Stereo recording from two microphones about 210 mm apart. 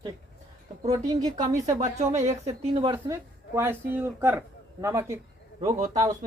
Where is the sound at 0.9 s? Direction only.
20° right (ahead or behind).